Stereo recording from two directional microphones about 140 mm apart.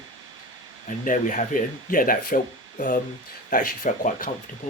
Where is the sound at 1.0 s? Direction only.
70° left (ahead or behind); by 4.3 s 90° left.